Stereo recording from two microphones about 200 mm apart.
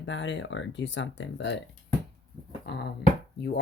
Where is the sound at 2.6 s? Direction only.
55° left (ahead or behind).